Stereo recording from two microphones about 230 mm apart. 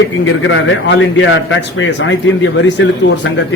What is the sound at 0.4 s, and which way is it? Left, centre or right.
A man's voice, left.